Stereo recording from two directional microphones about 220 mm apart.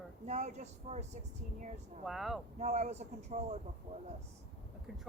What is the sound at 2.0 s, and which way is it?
Speech, centre (ahead or behind).